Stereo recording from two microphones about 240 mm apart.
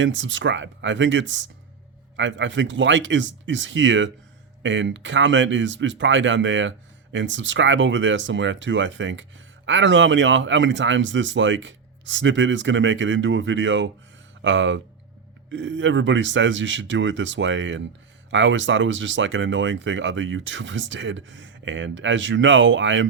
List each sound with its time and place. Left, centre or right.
0.0 s speech: right